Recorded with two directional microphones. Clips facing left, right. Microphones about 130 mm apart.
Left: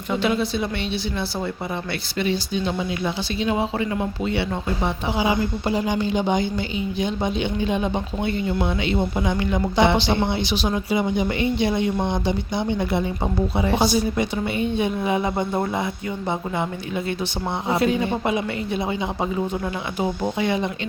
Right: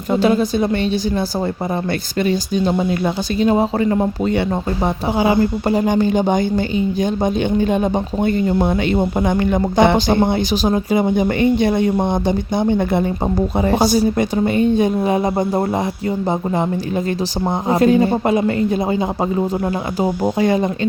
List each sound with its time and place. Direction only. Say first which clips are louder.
0.1 s speech: right 7 dB; 40° right (ahead or behind)
17.7 s speech: right 7 dB; 45° right (ahead or behind)